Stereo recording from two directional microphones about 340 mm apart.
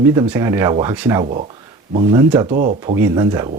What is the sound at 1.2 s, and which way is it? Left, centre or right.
Speech, centre.